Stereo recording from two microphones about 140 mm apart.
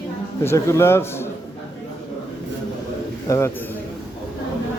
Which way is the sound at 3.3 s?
20° left (ahead or behind).